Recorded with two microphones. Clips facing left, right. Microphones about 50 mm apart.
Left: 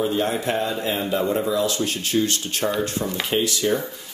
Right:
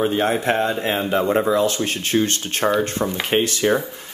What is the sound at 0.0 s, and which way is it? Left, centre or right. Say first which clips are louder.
A man's voice: right 3 dB; right.